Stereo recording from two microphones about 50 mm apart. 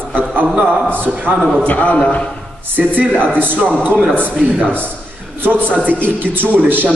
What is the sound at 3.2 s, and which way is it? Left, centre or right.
Speech, right.